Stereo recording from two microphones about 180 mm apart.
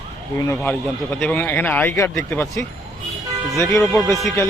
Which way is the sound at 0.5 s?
10° left (ahead or behind).